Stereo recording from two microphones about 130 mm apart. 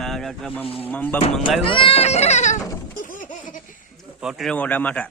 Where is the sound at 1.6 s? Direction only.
45° left (ahead or behind); by 2.5 s 60° left (ahead or behind).